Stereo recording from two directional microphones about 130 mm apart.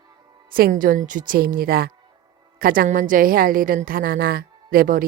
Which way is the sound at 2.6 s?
90° right.